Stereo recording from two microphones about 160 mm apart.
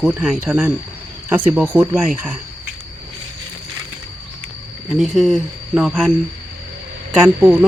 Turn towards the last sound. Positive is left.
turn(degrees=-5)  # may be behind; listen again after turning